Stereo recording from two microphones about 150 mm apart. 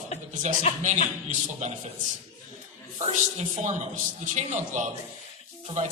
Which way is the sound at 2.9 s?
50° right (ahead or behind).